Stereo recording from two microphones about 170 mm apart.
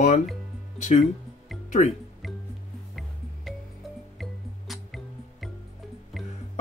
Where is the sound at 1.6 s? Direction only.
45° left (ahead or behind).